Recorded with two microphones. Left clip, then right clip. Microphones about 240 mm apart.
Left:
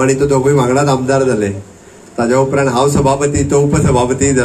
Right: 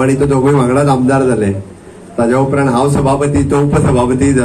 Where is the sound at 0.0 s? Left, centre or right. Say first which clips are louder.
Even; left.